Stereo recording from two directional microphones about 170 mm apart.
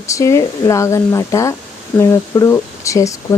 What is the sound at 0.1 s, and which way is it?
Speech, 20° left (ahead or behind).